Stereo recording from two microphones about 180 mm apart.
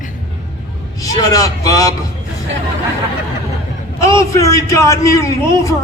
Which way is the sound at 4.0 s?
15° left (ahead or behind).